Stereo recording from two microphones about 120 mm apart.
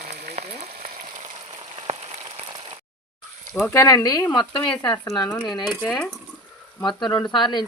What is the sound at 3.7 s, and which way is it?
Speech, 25° left (ahead or behind).